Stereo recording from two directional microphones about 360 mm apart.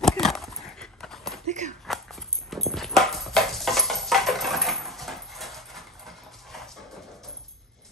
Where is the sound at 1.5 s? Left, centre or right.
Centre.